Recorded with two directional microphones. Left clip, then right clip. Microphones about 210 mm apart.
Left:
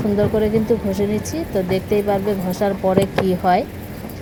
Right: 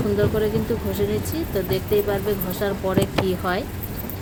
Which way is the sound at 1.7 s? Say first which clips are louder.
Left 3 dB; 15° left (ahead or behind).